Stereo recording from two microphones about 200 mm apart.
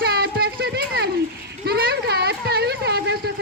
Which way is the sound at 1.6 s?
55° right (ahead or behind).